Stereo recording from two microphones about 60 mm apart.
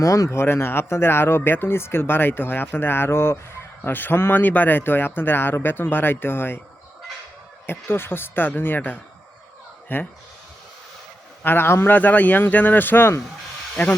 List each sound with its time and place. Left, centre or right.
0.0 s speech: left
7.7 s speech: left
9.9 s speech: left
11.4 s speech: left
11.9 s speech: left